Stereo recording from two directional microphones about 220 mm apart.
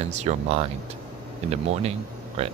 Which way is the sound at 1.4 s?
30° right (ahead or behind).